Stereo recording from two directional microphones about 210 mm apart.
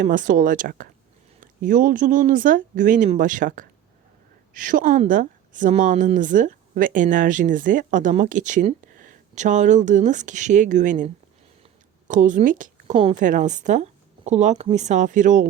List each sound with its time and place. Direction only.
0.0 s a woman's voice: 40° right (ahead or behind)